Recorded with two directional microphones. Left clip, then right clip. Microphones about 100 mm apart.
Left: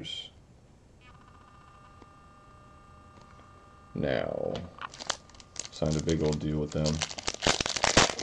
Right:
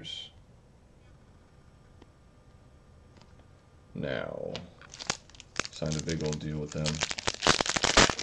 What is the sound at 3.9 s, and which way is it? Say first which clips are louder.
Speech: left 4 dB; 5° left (ahead or behind).